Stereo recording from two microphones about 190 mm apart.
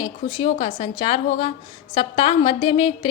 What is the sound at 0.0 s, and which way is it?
A woman's voice, 25° left (ahead or behind).